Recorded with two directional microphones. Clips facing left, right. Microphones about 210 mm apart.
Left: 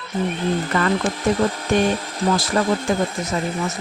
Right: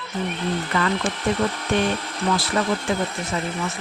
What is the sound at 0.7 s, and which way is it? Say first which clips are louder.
Speech: left 1 dB; 45° left (ahead or behind).